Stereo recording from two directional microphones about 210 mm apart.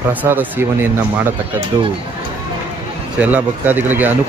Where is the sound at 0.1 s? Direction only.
10° right (ahead or behind).